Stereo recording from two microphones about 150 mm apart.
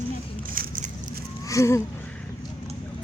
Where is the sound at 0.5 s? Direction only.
70° right (ahead or behind).